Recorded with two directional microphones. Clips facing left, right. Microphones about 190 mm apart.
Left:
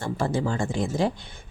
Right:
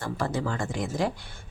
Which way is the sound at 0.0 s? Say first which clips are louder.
Left 3 dB; 25° left (ahead or behind).